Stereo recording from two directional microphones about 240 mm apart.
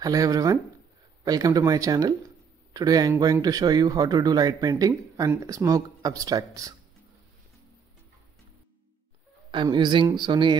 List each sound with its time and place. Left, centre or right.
0.0 s speech: centre
9.5 s speech: centre